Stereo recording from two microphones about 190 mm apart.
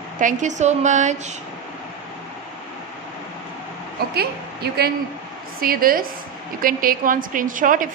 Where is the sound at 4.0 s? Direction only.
55° right (ahead or behind).